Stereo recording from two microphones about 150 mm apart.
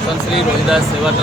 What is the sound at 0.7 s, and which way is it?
Speech, 5° right (ahead or behind).